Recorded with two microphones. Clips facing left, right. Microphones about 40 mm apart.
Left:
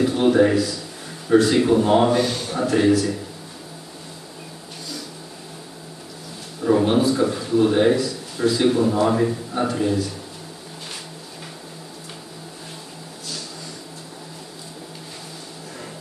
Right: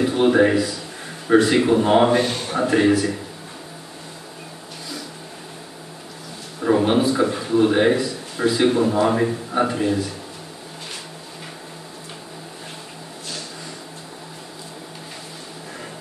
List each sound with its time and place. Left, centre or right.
0.0 s a man's voice: centre
6.6 s a man's voice: centre